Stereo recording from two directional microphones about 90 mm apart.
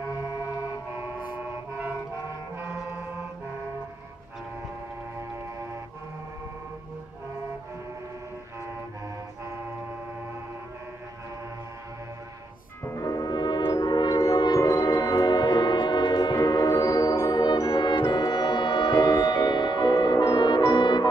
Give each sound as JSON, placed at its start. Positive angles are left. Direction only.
{"t": 0.9, "sound": "vehicle", "side_deg": -20}
{"t": 2.2, "sound": "music", "side_deg": -30}
{"t": 12.9, "sound": "brass instrument", "side_deg": 45}
{"t": 13.7, "sound": "music", "side_deg": 50}
{"t": 14.6, "sound": "music", "side_deg": 35}
{"t": 14.9, "sound": "a sound", "side_deg": 50}
{"t": 17.1, "sound": "music", "side_deg": 45}